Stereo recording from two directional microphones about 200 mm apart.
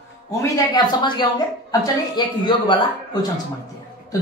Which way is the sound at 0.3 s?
20° left (ahead or behind).